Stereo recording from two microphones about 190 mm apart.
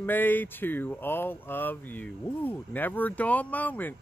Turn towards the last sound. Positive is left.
turn(degrees=10)  # may be behind; listen again after turning